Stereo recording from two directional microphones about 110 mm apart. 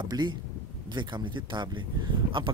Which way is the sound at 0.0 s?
40° right (ahead or behind).